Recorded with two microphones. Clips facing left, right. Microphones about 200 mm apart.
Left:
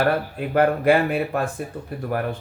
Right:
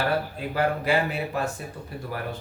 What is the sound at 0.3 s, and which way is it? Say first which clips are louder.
Speech: left 6 dB; 55° left (ahead or behind).